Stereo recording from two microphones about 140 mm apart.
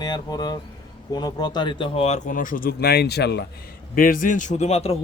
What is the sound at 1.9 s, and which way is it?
Speech, 50° left (ahead or behind).